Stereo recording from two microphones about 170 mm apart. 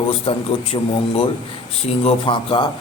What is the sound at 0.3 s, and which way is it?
A man's voice, 35° left (ahead or behind).